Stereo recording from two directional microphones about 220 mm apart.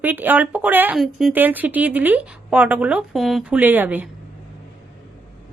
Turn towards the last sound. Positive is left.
turn(degrees=-5)  # may be behind; listen again after turning